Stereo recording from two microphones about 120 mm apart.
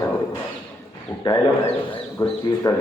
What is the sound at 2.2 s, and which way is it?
Speech, 25° left (ahead or behind).